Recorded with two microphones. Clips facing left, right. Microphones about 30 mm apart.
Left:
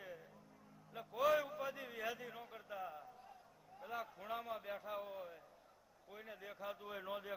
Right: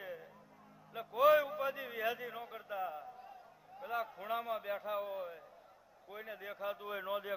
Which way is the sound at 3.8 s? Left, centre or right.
Right.